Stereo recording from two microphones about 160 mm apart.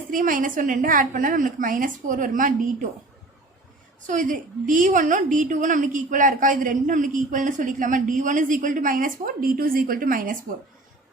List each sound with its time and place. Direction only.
0.1 s a woman's voice: 55° right (ahead or behind)
4.0 s a woman's voice: 55° right (ahead or behind)